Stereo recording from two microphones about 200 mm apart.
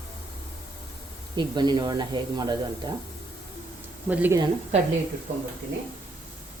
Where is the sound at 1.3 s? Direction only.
20° right (ahead or behind).